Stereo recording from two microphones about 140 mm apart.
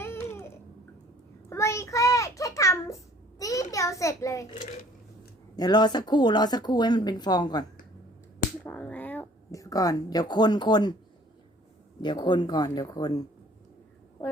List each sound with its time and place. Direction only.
0.0 s babbling: 20° left (ahead or behind)
1.5 s child singing: 20° left (ahead or behind)
5.5 s speech: 30° left (ahead or behind)
8.6 s finger snapping: 10° left (ahead or behind)
9.5 s speech: 25° left (ahead or behind)
12.0 s speech: 35° left (ahead or behind)